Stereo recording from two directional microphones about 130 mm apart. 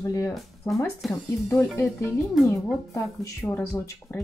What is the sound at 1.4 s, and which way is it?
Speech, 15° left (ahead or behind).